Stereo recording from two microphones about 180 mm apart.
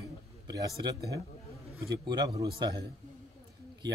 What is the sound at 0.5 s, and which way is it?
A man's voice, 20° right (ahead or behind).